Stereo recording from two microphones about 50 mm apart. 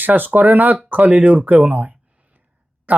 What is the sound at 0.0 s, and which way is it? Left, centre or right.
Speech, right.